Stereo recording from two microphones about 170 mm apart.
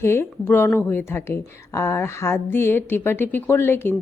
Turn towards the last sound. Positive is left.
turn(degrees=15)  # may be behind; listen again after turning